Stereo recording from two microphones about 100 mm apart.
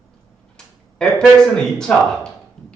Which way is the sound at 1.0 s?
5° left (ahead or behind).